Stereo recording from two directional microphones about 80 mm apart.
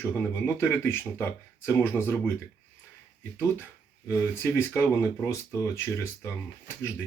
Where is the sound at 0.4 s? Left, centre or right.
Left.